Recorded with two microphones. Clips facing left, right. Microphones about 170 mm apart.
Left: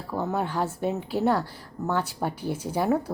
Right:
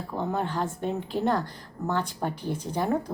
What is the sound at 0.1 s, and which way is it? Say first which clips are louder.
A woman's voice: left 2 dB; 5° left (ahead or behind).